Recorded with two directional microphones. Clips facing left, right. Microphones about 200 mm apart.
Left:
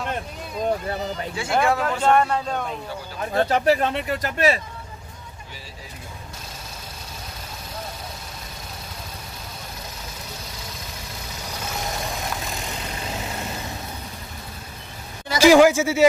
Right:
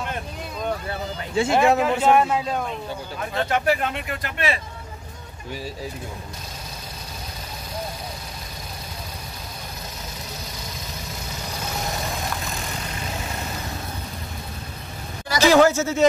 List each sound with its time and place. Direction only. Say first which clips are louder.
1.3 s speech: right 4 dB; 25° right (ahead or behind)
1.8 s speech: right 1 dB; 10° right (ahead or behind)
3.3 s speech: left 3 dB; 35° left (ahead or behind)
15.3 s speech: left 2 dB; 10° left (ahead or behind)